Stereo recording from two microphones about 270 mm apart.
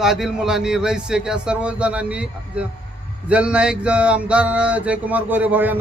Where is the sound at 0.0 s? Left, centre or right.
Centre.